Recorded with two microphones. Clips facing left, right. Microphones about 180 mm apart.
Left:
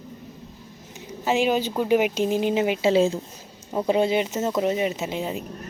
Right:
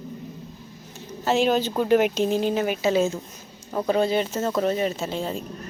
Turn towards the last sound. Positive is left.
turn(degrees=20)  # may be behind; listen again after turning